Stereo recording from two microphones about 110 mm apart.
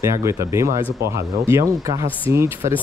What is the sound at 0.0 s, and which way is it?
Speech, 25° right (ahead or behind).